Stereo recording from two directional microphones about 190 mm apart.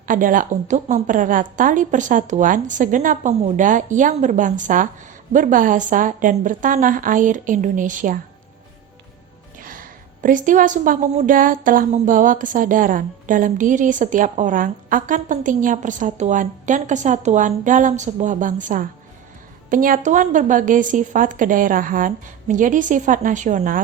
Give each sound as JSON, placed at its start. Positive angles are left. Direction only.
{"t": 0.0, "sound": "a woman's voice", "side_deg": -45}
{"t": 9.6, "sound": "a woman's voice", "side_deg": -45}